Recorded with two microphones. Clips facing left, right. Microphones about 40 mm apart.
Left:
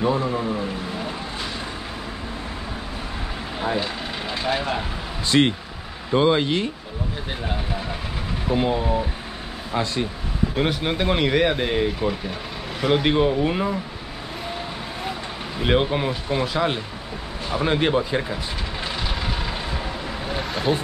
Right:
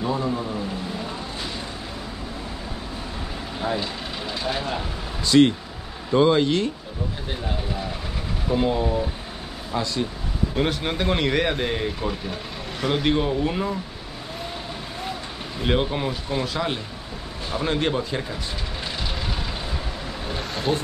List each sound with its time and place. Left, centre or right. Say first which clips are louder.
0.0 s speech: left 3 dB; left
3.5 s speech: left 2 dB; centre
5.2 s speech: right 3 dB; left
8.5 s speech: even; centre
10.5 s speech: left 1 dB; centre
15.6 s speech: left 3 dB; centre
20.2 s vehicle: left 2 dB; centre